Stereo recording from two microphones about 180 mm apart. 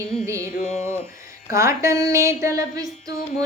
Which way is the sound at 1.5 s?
15° right (ahead or behind).